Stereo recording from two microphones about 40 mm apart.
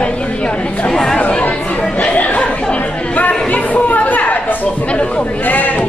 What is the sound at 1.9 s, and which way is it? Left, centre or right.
Chatter, left.